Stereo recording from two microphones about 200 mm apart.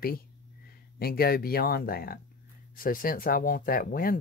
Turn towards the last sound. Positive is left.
turn(degrees=45)  # may be behind; listen again after turning